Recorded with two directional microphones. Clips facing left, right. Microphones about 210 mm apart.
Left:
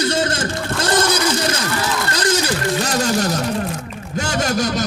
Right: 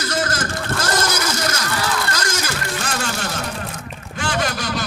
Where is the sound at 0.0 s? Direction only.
30° left (ahead or behind).